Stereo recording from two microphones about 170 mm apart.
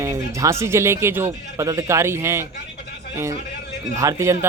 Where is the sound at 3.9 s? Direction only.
15° right (ahead or behind).